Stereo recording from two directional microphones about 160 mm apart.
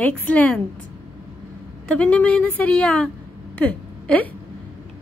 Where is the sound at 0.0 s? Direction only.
10° left (ahead or behind).